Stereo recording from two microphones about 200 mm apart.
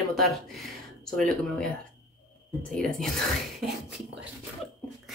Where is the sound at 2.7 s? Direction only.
Centre (ahead or behind).